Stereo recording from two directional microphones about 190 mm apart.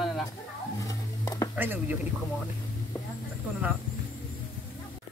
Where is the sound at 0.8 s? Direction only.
20° left (ahead or behind).